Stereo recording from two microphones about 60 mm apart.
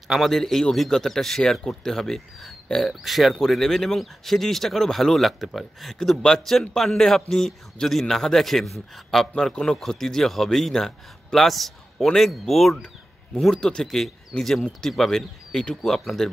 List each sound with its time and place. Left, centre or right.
0.1 s a man's voice: centre